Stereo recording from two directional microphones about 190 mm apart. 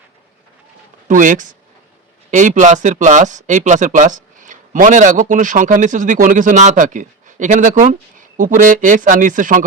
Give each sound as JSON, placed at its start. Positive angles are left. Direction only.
{"t": 1.0, "sound": "speech", "side_deg": -40}